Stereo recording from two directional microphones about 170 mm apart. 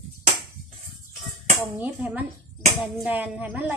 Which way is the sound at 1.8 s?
10° right (ahead or behind).